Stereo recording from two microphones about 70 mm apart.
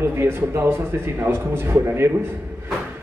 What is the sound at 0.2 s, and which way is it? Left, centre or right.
A man's voice, right.